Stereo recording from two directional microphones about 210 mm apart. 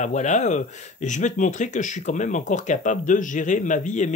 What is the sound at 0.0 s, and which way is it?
Speech, 35° left (ahead or behind).